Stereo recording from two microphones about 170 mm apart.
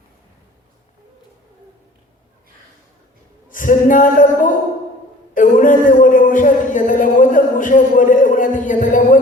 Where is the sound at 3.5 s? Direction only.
50° left (ahead or behind).